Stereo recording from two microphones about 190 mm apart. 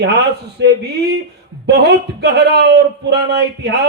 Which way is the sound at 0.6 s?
60° right (ahead or behind).